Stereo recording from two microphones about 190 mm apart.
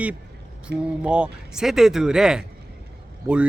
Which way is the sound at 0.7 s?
60° right (ahead or behind).